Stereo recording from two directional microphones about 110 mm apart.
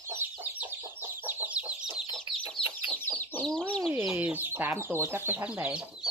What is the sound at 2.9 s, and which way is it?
Chicken, 15° left (ahead or behind).